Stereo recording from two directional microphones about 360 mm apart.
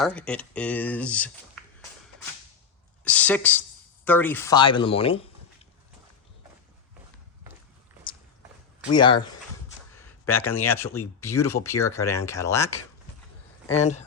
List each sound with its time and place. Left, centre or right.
0.0 s speech: centre
3.0 s a woman's voice: centre
8.9 s speech: centre
13.7 s speech: centre